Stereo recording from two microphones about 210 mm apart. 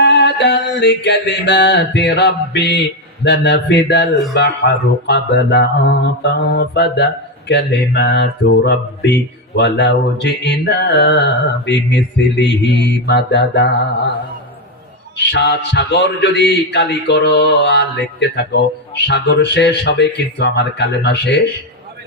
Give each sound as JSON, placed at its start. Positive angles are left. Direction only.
{"t": 0.0, "sound": "mantra", "side_deg": 55}
{"t": 3.2, "sound": "speech", "side_deg": 55}
{"t": 4.4, "sound": "a sound", "side_deg": 55}
{"t": 9.6, "sound": "speech", "side_deg": 55}
{"t": 15.2, "sound": "speech", "side_deg": 55}